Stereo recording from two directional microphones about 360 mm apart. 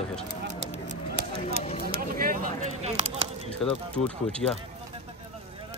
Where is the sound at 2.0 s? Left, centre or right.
Right.